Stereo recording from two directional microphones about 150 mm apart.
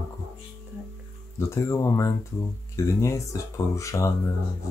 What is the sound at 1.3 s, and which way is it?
Speech, 20° left (ahead or behind).